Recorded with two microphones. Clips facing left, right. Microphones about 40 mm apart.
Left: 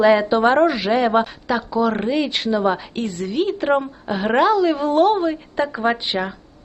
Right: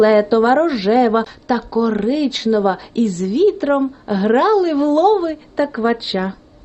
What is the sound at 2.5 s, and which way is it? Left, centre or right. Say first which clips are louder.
Speech: right 5 dB; centre.